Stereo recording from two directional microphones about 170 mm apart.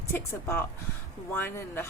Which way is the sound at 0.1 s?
15° left (ahead or behind).